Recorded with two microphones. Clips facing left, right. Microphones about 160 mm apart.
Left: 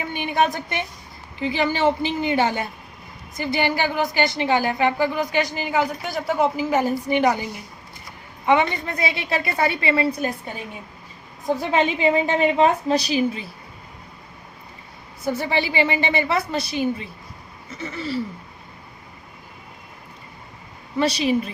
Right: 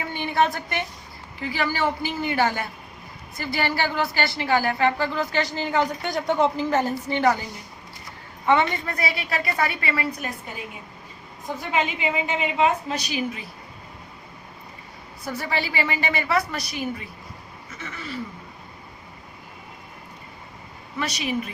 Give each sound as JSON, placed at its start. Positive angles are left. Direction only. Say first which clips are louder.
{"t": 0.1, "sound": "a sound", "louder": "left 1 dB", "side_deg": 15}
{"t": 1.4, "sound": "a woman's voice", "louder": "left 4 dB", "side_deg": 20}
{"t": 8.4, "sound": "a woman's voice", "louder": "left 2 dB", "side_deg": 15}
{"t": 11.4, "sound": "a woman's voice", "louder": "left 5 dB", "side_deg": 35}
{"t": 15.3, "sound": "a woman's voice", "louder": "left 5 dB", "side_deg": 25}
{"t": 21.0, "sound": "a woman's voice", "louder": "left 7 dB", "side_deg": 30}